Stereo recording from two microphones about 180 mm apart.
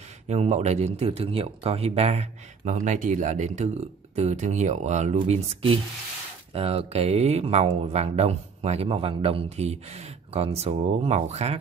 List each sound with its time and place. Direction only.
0.3 s speech: 40° right (ahead or behind)